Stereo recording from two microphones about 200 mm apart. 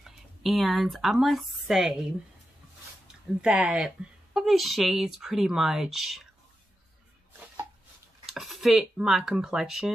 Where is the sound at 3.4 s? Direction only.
5° right (ahead or behind).